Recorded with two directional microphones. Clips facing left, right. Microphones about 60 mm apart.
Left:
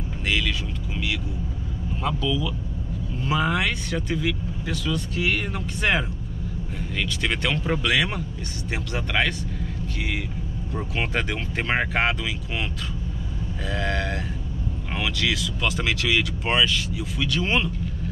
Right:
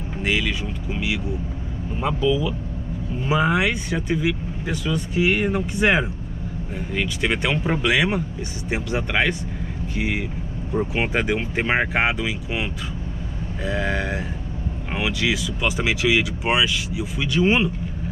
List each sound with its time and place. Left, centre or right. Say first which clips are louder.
0.2 s speech: right 3 dB; centre
13.7 s speech: right 3 dB; centre